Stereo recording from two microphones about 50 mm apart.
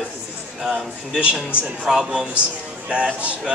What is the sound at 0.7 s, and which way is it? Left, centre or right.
A man's voice, right.